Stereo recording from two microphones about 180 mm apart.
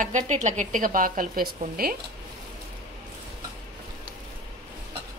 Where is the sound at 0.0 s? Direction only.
45° right (ahead or behind).